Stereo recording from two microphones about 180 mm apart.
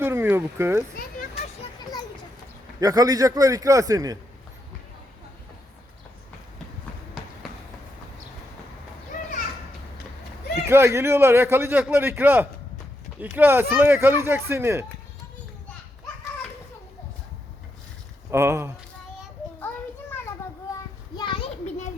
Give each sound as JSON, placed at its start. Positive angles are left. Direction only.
{"t": 0.0, "sound": "a sound", "side_deg": -10}
{"t": 2.8, "sound": "a man's voice", "side_deg": -20}
{"t": 10.7, "sound": "a man's voice", "side_deg": -15}
{"t": 18.3, "sound": "speech", "side_deg": -15}
{"t": 19.5, "sound": "children playing", "side_deg": 10}
{"t": 21.2, "sound": "a sound", "side_deg": 25}